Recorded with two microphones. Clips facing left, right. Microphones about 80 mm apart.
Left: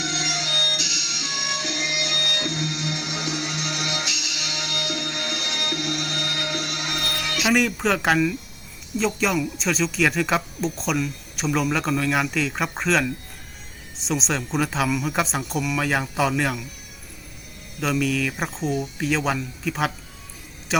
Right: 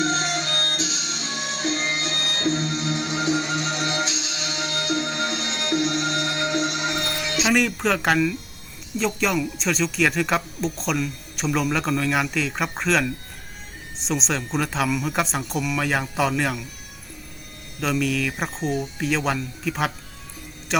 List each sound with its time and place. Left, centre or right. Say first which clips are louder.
0.0 s music: right 5 dB; right
7.5 s speech: left 1 dB; centre
17.7 s speech: even; centre